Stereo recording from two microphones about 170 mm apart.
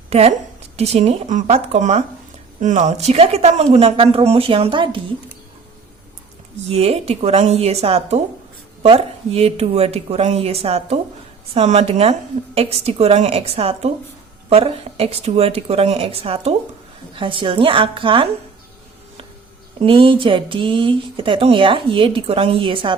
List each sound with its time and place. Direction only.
0.1 s a woman's voice: 35° right (ahead or behind)
6.7 s speech: 35° right (ahead or behind)
19.8 s speech: 30° right (ahead or behind)